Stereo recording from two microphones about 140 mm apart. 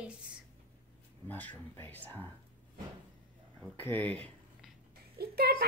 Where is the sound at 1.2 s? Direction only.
10° left (ahead or behind).